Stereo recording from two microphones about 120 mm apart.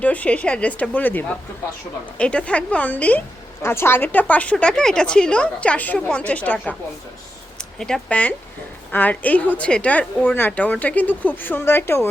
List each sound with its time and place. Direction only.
0.0 s a woman's voice: 10° left (ahead or behind)